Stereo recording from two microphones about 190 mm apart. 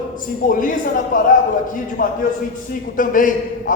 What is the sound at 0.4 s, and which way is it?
A man's voice, 45° left (ahead or behind).